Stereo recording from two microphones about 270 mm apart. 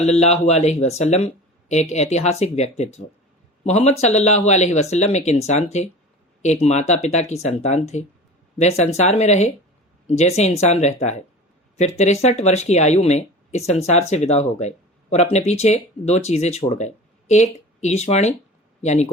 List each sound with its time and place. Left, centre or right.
0.0 s speech: left